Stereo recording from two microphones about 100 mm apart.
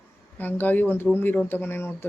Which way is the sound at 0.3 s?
20° left (ahead or behind).